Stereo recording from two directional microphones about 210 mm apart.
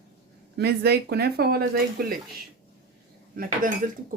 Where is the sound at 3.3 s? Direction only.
40° right (ahead or behind).